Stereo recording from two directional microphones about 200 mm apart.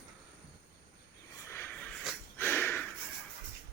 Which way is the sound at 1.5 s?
10° left (ahead or behind).